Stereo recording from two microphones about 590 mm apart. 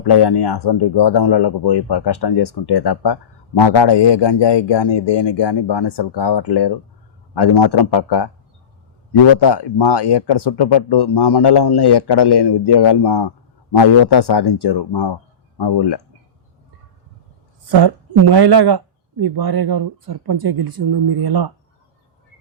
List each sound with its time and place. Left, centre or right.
0.0 s speech: left
9.4 s speech: left
17.7 s speech: right